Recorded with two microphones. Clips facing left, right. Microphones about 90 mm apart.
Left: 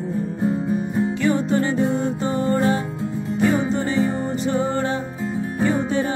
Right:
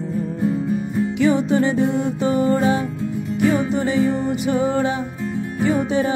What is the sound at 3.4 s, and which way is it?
Music, 20° left (ahead or behind).